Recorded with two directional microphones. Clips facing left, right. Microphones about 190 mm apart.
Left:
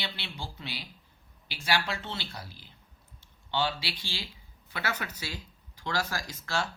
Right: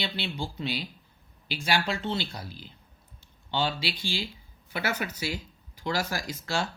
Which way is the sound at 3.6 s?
20° right (ahead or behind).